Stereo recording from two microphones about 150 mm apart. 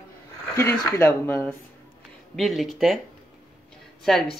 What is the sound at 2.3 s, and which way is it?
Speech, centre (ahead or behind).